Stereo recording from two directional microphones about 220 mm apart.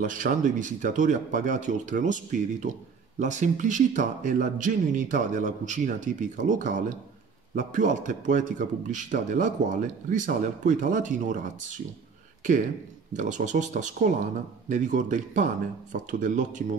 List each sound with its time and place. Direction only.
0.0 s speech: 35° right (ahead or behind)
3.2 s speech: 35° right (ahead or behind)
13.1 s speech: 35° right (ahead or behind)